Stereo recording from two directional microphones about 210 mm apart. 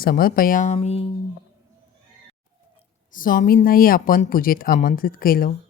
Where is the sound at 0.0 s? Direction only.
45° left (ahead or behind); by 1.0 s 30° left (ahead or behind).